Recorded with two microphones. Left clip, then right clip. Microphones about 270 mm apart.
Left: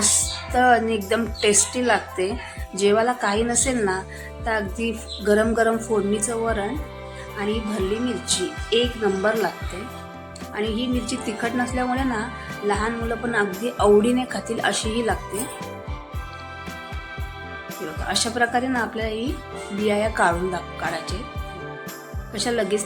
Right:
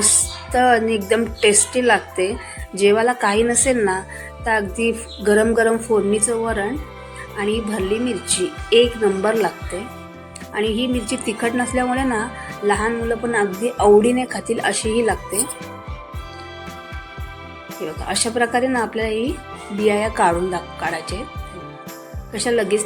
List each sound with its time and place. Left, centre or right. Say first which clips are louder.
0.5 s a woman's voice: right 2 dB; centre
10.5 s a woman's voice: right 5 dB; centre
17.7 s a woman's voice: right 2 dB; centre
22.3 s a woman's voice: right 4 dB; centre